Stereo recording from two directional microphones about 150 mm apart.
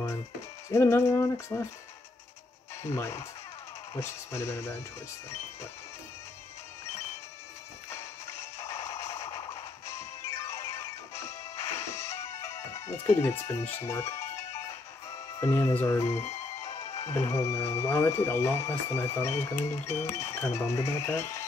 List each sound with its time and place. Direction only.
0.7 s speech: 15° left (ahead or behind)
2.8 s speech: 20° left (ahead or behind)
8.4 s music: 20° left (ahead or behind)
8.8 s a sound: 20° left (ahead or behind)
9.8 s music: 20° left (ahead or behind)
15.4 s speech: 15° left (ahead or behind)